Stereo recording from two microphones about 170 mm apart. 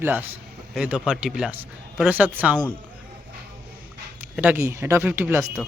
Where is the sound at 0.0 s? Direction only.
10° right (ahead or behind).